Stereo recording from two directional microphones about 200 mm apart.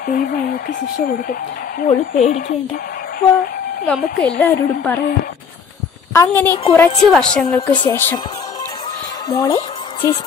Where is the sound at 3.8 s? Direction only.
5° left (ahead or behind).